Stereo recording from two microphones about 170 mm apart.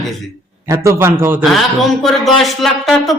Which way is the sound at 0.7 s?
15° right (ahead or behind).